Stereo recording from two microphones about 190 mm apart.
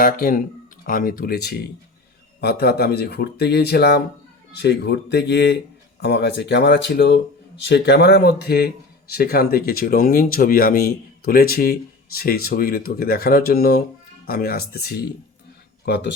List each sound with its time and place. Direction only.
0.0 s speech: 50° left (ahead or behind)
15.9 s speech: 65° left (ahead or behind)